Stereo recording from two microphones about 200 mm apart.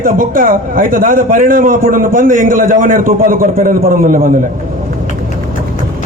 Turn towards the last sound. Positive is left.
turn(degrees=-45)  # may be behind; listen again after turning